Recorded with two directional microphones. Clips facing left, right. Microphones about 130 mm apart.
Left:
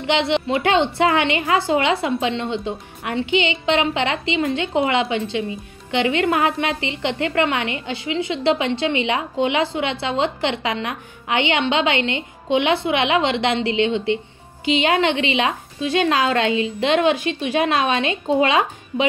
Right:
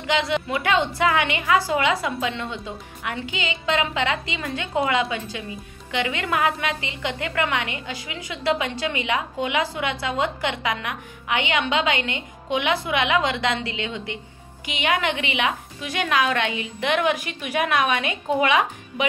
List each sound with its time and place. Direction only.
0.0 s a woman's voice: 25° left (ahead or behind)